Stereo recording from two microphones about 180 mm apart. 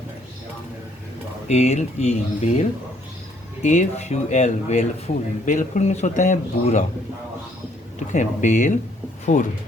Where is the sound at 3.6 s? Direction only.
40° left (ahead or behind).